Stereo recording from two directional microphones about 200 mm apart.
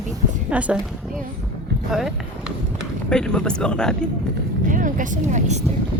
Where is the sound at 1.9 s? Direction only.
Centre (ahead or behind).